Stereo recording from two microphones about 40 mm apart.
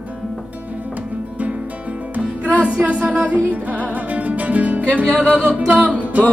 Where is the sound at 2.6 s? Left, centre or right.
Right.